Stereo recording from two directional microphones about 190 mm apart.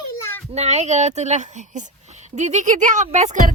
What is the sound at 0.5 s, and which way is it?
Speech, 35° right (ahead or behind).